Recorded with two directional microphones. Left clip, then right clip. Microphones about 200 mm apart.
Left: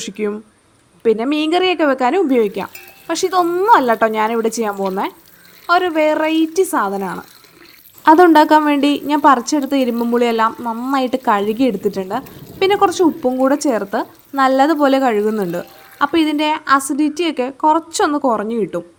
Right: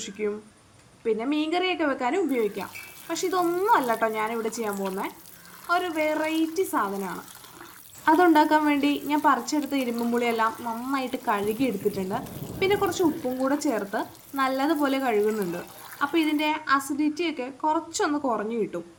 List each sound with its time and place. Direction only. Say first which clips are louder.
0.0 s a woman's voice: left 8 dB; 45° left (ahead or behind)